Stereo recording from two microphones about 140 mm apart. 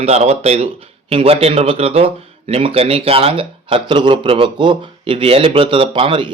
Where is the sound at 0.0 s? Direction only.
50° right (ahead or behind).